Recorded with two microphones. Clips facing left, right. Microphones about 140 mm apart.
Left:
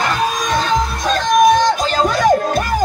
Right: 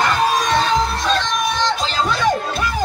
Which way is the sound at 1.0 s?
45° left (ahead or behind).